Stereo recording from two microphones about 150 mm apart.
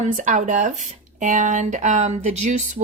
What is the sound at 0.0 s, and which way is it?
Speech, 55° right (ahead or behind).